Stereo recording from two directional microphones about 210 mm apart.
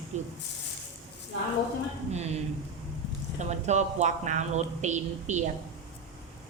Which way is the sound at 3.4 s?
35° right (ahead or behind).